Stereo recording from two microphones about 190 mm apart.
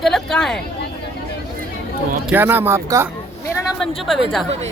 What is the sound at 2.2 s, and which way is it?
Speech, 10° right (ahead or behind).